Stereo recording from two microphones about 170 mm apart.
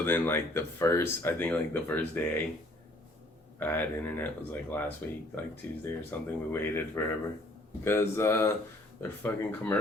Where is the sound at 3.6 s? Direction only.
10° left (ahead or behind).